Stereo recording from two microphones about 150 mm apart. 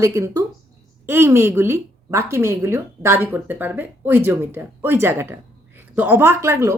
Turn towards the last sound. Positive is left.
turn(degrees=-20)  # may be behind; listen again after turning